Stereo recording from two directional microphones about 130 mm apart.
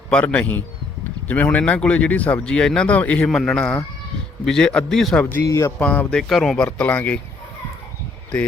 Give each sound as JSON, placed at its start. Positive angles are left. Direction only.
{"t": 0.1, "sound": "speech", "side_deg": 10}
{"t": 5.3, "sound": "speech", "side_deg": 20}
{"t": 5.8, "sound": "speech", "side_deg": 10}